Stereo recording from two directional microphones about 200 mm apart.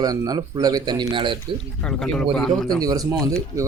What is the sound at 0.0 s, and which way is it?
Speech, 20° right (ahead or behind).